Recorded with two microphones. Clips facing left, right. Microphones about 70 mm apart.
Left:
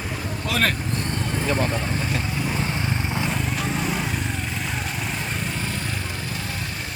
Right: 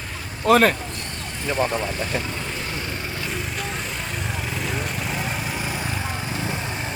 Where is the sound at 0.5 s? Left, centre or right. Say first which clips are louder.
Right 11 dB; right.